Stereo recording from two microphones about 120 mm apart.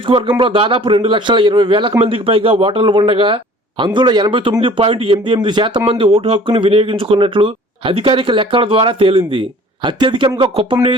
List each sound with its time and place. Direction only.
0.1 s speech: 45° right (ahead or behind)
6.1 s speech: 50° right (ahead or behind)